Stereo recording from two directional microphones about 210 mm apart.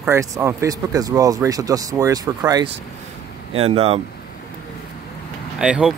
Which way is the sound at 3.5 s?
30° right (ahead or behind).